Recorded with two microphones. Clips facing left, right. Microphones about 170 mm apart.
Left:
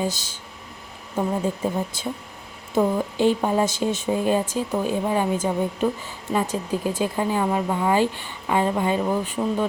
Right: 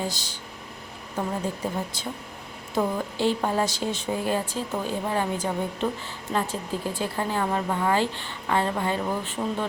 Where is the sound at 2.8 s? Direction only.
20° left (ahead or behind).